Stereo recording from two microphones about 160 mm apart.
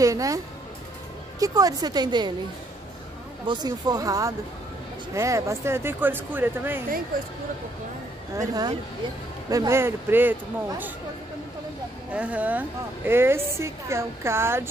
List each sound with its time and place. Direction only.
0.0 s a woman's voice: 20° right (ahead or behind)
1.4 s a woman's voice: 25° right (ahead or behind)
3.4 s a woman's voice: 25° right (ahead or behind)
8.4 s a woman's voice: 25° right (ahead or behind)
12.1 s a woman's voice: 10° right (ahead or behind)